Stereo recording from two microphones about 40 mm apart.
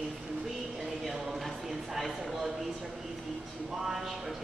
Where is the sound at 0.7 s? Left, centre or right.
Centre.